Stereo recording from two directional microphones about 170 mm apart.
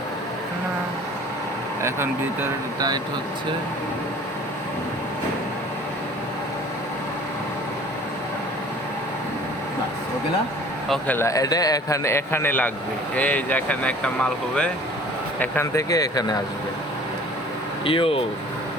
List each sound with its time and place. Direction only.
1.8 s speech: 15° right (ahead or behind)
10.8 s a man's voice: 5° left (ahead or behind); by 16.4 s 20° left (ahead or behind)
17.8 s speech: 35° left (ahead or behind)